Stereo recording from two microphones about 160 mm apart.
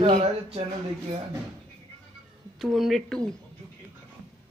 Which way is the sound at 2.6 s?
Centre (ahead or behind).